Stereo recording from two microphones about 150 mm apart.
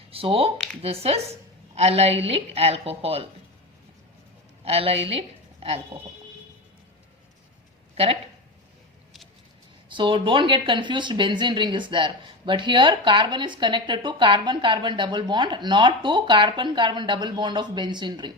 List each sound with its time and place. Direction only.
0.1 s speech: 40° right (ahead or behind)
4.6 s speech: 40° right (ahead or behind)
7.9 s speech: 40° right (ahead or behind)
9.9 s speech: 35° right (ahead or behind)